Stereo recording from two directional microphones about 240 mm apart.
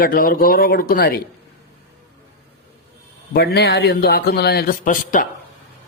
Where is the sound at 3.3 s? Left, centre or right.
Left.